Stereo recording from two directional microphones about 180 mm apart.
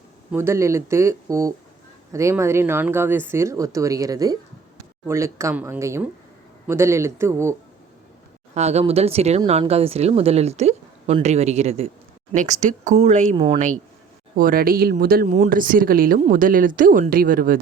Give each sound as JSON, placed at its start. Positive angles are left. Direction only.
{"t": 0.3, "sound": "speech", "side_deg": -15}
{"t": 8.5, "sound": "speech", "side_deg": -35}
{"t": 13.3, "sound": "speech", "side_deg": -25}
{"t": 14.3, "sound": "speech", "side_deg": -55}